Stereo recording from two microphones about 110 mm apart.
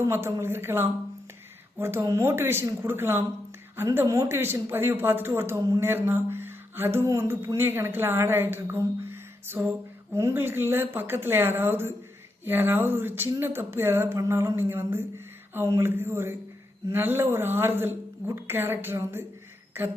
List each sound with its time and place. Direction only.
0.0 s a woman's voice: 25° right (ahead or behind)
5.6 s speech: 30° right (ahead or behind)
5.9 s a woman's voice: 20° right (ahead or behind)